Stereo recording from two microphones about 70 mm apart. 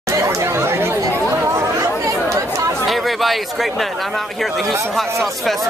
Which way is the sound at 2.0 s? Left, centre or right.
Right.